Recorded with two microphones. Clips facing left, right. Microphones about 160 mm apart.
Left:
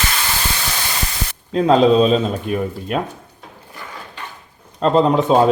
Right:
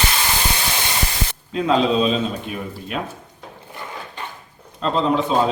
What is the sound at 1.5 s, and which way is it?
Speech, 40° left (ahead or behind).